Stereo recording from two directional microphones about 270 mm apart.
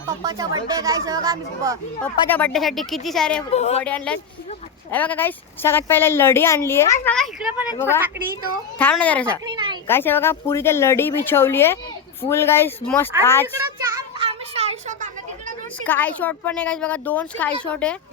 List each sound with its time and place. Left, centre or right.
0.2 s speech: centre
2.0 s speech: centre
3.5 s speech: left
3.8 s a woman's voice: centre
7.8 s a woman's voice: centre
8.0 s speech: centre
8.8 s a woman's voice: centre
13.9 s children playing: right
15.8 s speech: centre